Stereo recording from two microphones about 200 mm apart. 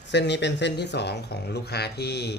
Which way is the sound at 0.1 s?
60° left (ahead or behind).